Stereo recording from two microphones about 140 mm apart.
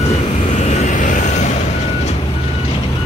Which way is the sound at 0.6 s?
55° left (ahead or behind).